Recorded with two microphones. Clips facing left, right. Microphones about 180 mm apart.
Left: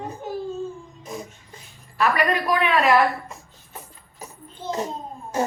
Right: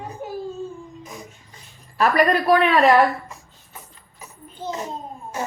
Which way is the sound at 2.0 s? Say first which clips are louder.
Right 3 dB; 40° right (ahead or behind).